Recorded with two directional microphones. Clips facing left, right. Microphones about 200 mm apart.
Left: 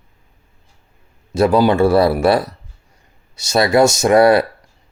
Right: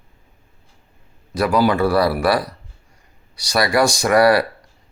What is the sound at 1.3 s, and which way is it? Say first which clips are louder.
A man's voice: left 4 dB; 25° left (ahead or behind).